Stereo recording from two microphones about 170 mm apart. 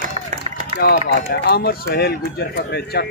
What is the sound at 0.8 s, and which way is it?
Speech, 65° left (ahead or behind).